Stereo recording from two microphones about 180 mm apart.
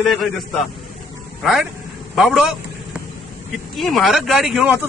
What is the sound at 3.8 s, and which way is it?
Speech, centre (ahead or behind).